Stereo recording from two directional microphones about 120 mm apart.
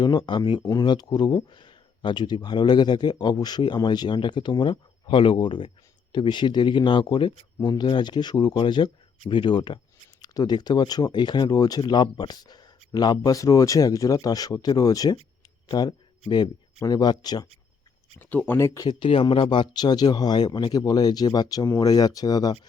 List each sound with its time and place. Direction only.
0.0 s speech: 40° left (ahead or behind)
18.2 s speech: 15° left (ahead or behind)
18.9 s speech: 45° left (ahead or behind)